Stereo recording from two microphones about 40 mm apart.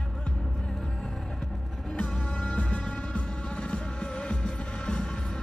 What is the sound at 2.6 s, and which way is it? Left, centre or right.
Music, left.